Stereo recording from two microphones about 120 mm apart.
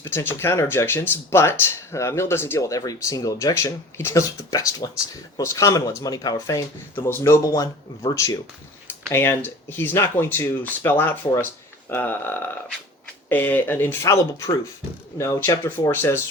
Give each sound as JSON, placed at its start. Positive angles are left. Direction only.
{"t": 0.0, "sound": "speech", "side_deg": 20}
{"t": 6.9, "sound": "speech", "side_deg": 20}
{"t": 8.9, "sound": "speech", "side_deg": 20}